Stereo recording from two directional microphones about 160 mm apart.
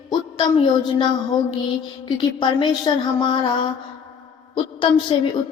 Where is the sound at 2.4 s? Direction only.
30° left (ahead or behind).